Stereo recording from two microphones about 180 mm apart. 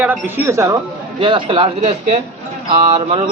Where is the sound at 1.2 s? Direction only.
30° right (ahead or behind).